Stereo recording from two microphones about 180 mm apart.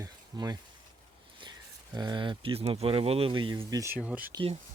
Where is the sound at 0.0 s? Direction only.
20° right (ahead or behind).